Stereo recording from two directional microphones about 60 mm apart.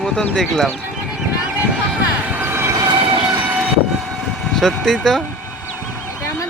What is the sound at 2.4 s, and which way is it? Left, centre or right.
Train, right.